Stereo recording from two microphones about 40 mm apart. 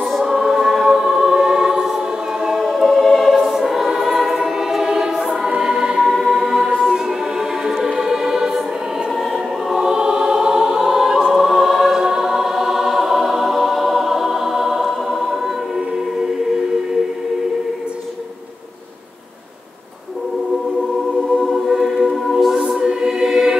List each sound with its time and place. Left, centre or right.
0.2 s choir: centre
2.6 s choir: centre
5.6 s music: centre
6.0 s music: centre
6.3 s choir: centre
7.6 s music: centre
9.7 s choir: centre
21.4 s choir: centre
21.7 s music: centre
22.8 s choir: centre